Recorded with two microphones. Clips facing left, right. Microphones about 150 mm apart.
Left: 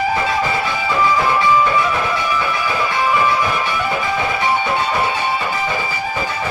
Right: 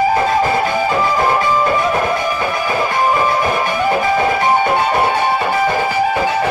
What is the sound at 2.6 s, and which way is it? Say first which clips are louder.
Music: right 5 dB; 45° right (ahead or behind).